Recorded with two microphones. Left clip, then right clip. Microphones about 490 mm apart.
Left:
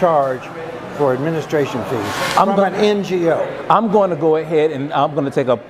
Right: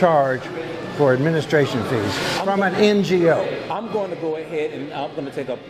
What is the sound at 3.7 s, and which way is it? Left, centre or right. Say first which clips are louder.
A man's voice: left 11 dB; left.